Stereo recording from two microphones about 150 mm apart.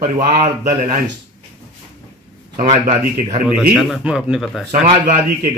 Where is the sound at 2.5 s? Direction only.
50° right (ahead or behind).